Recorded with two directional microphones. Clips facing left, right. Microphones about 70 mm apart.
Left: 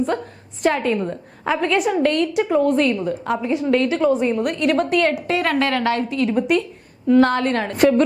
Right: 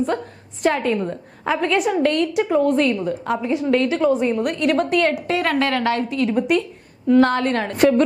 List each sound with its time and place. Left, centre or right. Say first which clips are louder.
0.0 s a woman's voice: even; left